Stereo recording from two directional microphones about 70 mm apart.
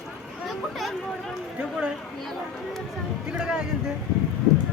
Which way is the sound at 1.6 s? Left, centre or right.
Centre.